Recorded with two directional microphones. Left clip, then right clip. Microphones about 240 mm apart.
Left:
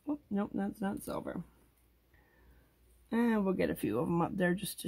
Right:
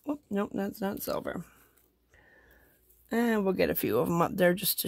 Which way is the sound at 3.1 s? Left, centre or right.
Right.